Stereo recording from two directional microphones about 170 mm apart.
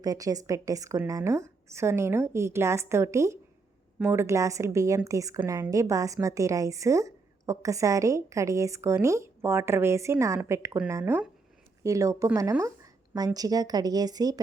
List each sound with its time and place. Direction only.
0.0 s a woman's voice: 20° right (ahead or behind)